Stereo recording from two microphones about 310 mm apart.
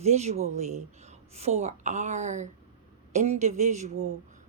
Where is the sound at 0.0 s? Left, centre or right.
Right.